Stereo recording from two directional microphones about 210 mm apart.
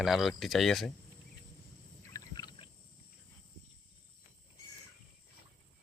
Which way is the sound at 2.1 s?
20° left (ahead or behind).